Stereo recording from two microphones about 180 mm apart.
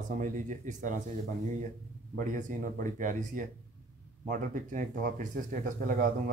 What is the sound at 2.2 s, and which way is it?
A man's voice, 45° right (ahead or behind).